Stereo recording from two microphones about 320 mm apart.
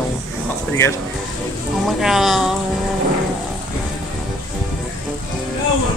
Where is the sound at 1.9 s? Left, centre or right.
Centre.